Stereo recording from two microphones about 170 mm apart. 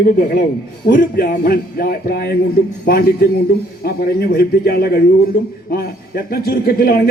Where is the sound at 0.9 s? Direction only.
55° left (ahead or behind).